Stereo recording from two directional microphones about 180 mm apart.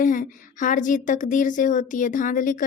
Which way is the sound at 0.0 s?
50° left (ahead or behind).